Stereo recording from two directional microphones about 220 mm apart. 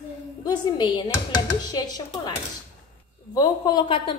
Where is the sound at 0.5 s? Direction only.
20° left (ahead or behind).